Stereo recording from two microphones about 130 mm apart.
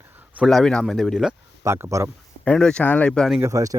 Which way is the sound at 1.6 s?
20° right (ahead or behind).